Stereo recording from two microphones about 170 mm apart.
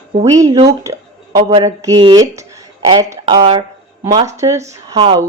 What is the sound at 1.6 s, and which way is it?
Speech, 20° right (ahead or behind).